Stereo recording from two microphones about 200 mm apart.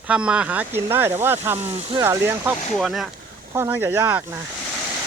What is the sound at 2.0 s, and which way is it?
Speech, 10° right (ahead or behind).